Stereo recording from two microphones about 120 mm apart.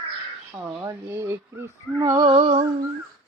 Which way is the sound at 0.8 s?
20° right (ahead or behind).